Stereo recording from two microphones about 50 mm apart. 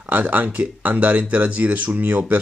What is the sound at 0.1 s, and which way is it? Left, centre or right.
Speech, right.